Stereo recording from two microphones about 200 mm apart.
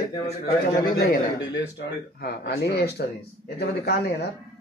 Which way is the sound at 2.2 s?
55° left (ahead or behind).